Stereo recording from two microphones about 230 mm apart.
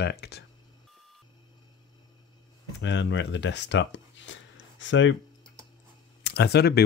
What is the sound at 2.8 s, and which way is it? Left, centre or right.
Speech, left.